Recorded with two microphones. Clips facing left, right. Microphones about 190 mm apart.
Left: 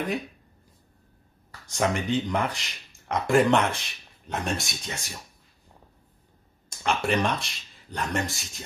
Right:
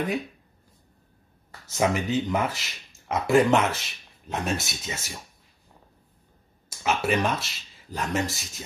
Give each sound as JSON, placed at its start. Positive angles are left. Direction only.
{"t": 1.7, "sound": "speech", "side_deg": -5}
{"t": 6.8, "sound": "speech", "side_deg": -5}